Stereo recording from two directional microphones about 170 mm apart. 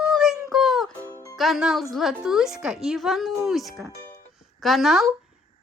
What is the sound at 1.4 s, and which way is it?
A woman's voice, centre (ahead or behind).